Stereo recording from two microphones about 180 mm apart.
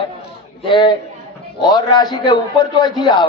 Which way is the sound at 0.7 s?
25° left (ahead or behind).